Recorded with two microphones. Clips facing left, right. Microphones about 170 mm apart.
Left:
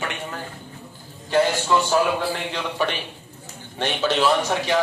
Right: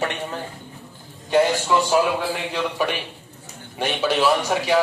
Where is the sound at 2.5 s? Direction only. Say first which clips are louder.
Right 2 dB; 10° right (ahead or behind).